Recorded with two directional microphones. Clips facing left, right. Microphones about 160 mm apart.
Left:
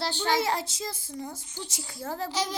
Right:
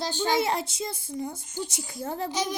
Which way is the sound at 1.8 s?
15° right (ahead or behind).